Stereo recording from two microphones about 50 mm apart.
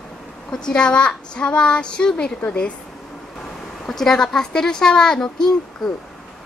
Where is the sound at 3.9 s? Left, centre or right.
Centre.